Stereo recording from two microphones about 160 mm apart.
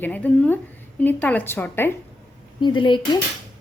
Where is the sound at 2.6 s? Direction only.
30° left (ahead or behind).